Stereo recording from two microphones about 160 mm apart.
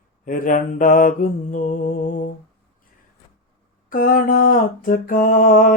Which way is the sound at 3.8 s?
60° left (ahead or behind).